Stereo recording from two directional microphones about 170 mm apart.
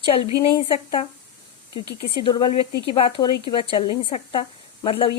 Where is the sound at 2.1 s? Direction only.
30° left (ahead or behind).